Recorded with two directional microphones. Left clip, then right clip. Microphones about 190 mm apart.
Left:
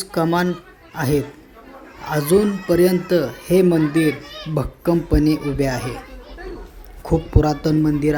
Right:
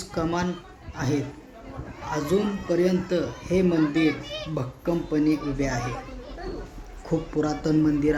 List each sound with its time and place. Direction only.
0.0 s speech: 35° left (ahead or behind)
7.0 s speech: 35° left (ahead or behind)